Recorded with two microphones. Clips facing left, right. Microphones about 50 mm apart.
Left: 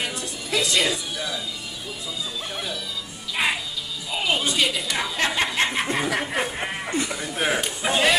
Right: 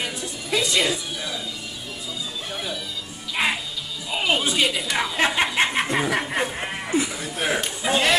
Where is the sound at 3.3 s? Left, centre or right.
Centre.